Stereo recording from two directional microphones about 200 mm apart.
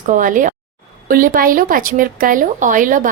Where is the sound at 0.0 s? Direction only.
40° right (ahead or behind).